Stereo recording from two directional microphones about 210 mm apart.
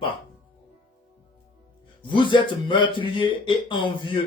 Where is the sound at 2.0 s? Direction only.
20° left (ahead or behind).